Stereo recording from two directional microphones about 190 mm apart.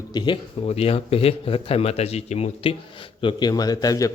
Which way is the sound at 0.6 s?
35° left (ahead or behind).